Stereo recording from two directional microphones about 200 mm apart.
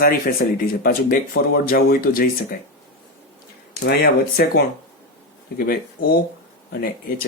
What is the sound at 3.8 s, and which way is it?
Speech, 55° left (ahead or behind).